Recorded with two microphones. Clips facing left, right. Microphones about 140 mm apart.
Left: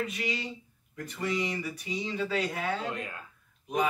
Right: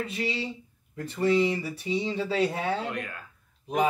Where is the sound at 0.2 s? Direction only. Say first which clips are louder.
Right 4 dB; 30° right (ahead or behind).